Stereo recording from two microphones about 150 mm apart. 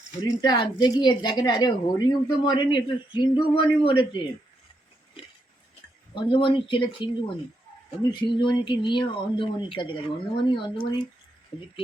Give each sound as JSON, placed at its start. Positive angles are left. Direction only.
{"t": 0.2, "sound": "a woman's voice", "side_deg": 30}
{"t": 6.1, "sound": "speech", "side_deg": 35}